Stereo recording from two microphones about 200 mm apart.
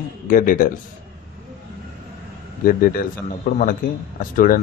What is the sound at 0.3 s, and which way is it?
Speech, 45° left (ahead or behind).